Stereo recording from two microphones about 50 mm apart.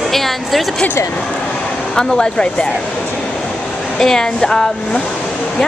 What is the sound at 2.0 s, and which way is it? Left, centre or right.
Speech, centre.